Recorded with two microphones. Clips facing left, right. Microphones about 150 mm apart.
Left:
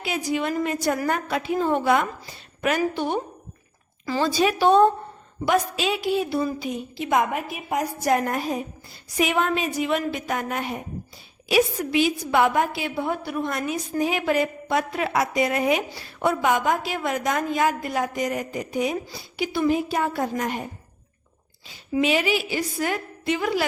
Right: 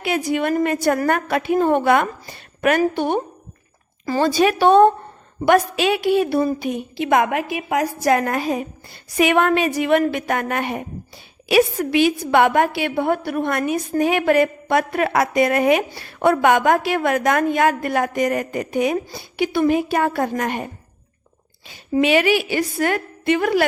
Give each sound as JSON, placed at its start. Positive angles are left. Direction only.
{"t": 0.0, "sound": "a woman's voice", "side_deg": -60}
{"t": 22.0, "sound": "a woman's voice", "side_deg": -70}